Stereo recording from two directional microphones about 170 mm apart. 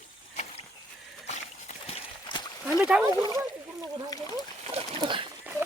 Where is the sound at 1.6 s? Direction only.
35° left (ahead or behind).